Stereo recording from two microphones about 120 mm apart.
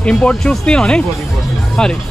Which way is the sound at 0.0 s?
10° left (ahead or behind).